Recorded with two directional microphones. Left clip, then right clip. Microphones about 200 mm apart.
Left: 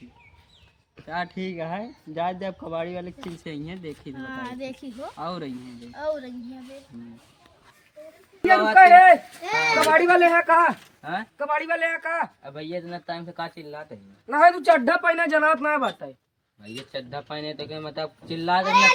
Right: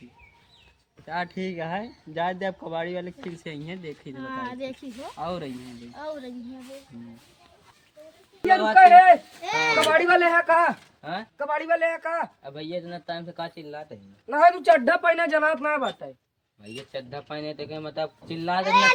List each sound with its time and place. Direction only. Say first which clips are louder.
1.0 s speech: even; 15° right (ahead or behind)
4.2 s a man's voice: right 2 dB; 15° left (ahead or behind)
5.1 s speech: right 2 dB; 15° right (ahead or behind)
5.9 s a man's voice: left 6 dB; 15° left (ahead or behind)
8.4 s speech: left 1 dB; 45° left (ahead or behind)
9.7 s speech: left 2 dB; 35° left (ahead or behind)
10.4 s a man's voice: left 2 dB; 15° left (ahead or behind)
11.0 s speech: left 3 dB; 30° right (ahead or behind)
11.3 s a man's voice: right 1 dB; 10° left (ahead or behind)
12.5 s speech: left 1 dB; 20° right (ahead or behind)
14.3 s speech: left 1 dB; 5° right (ahead or behind)
16.6 s speech: left 1 dB; 15° right (ahead or behind)